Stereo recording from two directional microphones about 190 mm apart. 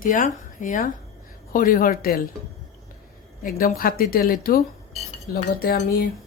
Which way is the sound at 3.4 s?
50° left (ahead or behind).